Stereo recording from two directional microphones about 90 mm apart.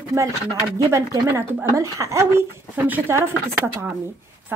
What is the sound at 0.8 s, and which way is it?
Speech, 35° right (ahead or behind).